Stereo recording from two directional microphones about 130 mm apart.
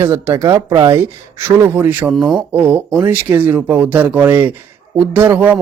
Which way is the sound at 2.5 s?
15° right (ahead or behind).